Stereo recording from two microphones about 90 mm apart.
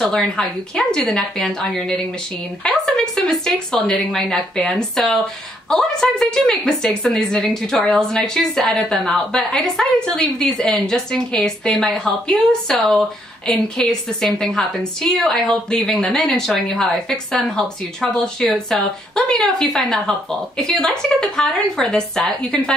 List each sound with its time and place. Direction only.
0.0 s a woman's voice: 5° left (ahead or behind)